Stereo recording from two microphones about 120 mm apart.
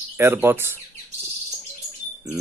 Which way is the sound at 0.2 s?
20° right (ahead or behind).